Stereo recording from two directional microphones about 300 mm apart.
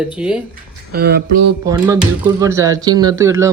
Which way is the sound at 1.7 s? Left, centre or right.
Centre.